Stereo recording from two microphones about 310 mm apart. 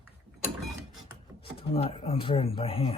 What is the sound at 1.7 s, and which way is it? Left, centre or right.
Speech, centre.